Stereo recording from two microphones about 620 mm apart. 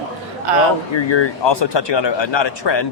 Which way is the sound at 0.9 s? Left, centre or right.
Left.